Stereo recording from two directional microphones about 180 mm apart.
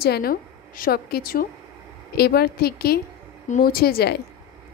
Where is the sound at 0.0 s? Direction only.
60° left (ahead or behind).